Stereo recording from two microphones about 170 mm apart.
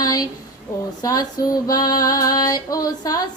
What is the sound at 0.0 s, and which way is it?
Speech, 20° left (ahead or behind).